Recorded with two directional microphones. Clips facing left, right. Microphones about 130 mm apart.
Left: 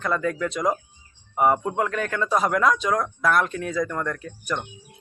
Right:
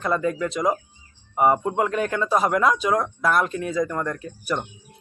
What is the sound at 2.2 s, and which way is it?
Speech, 5° right (ahead or behind).